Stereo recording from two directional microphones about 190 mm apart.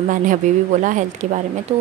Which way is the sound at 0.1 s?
45° right (ahead or behind).